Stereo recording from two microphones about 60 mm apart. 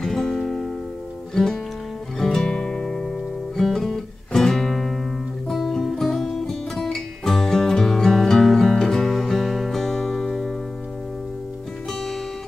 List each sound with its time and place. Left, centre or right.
0.0 s music: centre
11.9 s music: centre